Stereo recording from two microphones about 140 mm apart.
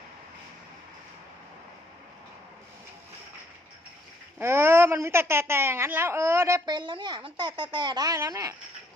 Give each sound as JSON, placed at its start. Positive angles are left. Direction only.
{"t": 4.4, "sound": "a woman's voice", "side_deg": -15}
{"t": 6.7, "sound": "speech", "side_deg": -35}